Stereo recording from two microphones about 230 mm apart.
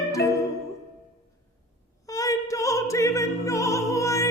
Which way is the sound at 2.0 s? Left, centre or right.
Centre.